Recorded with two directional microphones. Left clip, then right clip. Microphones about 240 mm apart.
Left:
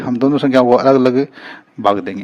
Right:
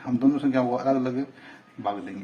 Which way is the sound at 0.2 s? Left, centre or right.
Left.